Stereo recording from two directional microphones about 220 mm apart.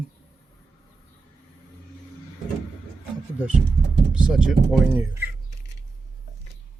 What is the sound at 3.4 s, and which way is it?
Speech, 5° right (ahead or behind).